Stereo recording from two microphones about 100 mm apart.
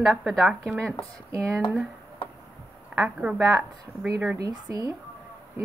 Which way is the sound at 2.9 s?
10° right (ahead or behind).